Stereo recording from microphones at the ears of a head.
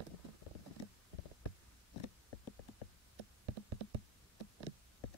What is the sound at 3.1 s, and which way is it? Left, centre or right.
Insect, right.